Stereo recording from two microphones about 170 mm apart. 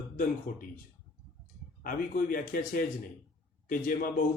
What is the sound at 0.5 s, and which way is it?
Speech, 55° left (ahead or behind).